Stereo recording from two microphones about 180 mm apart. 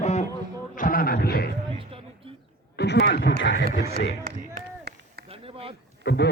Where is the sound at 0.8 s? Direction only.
55° left (ahead or behind).